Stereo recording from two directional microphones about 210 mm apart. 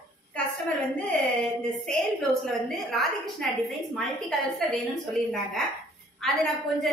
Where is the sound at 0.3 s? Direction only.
5° left (ahead or behind).